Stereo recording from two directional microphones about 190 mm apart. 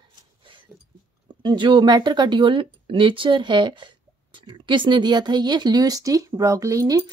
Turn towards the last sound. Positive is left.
turn(degrees=-15)  # may be behind; listen again after turning